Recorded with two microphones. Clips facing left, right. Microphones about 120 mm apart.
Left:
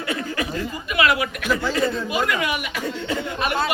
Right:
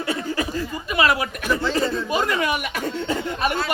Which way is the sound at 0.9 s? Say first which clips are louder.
Even; 35° right (ahead or behind).